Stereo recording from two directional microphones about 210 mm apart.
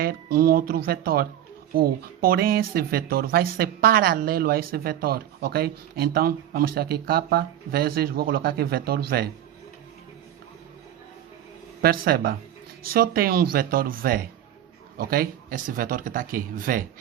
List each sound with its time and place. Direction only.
0.0 s speech: 45° right (ahead or behind)
11.8 s speech: 45° right (ahead or behind)